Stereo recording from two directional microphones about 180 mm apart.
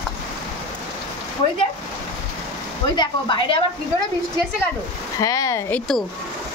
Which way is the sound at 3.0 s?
25° left (ahead or behind).